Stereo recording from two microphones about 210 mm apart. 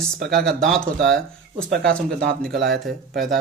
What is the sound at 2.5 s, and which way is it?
Speech, 50° right (ahead or behind).